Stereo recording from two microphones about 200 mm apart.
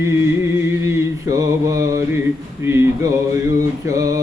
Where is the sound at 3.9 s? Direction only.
15° right (ahead or behind).